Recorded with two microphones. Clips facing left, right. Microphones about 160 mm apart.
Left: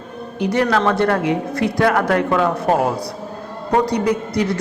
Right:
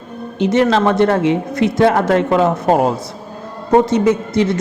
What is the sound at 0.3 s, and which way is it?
Speech, 25° right (ahead or behind).